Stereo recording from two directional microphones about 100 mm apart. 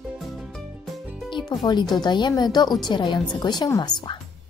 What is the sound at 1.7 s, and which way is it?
A woman's voice, 45° left (ahead or behind).